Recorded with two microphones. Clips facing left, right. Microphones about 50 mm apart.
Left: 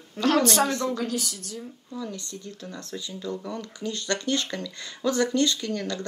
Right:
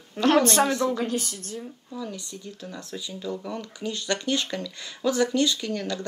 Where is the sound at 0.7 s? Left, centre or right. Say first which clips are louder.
Right 3 dB; centre.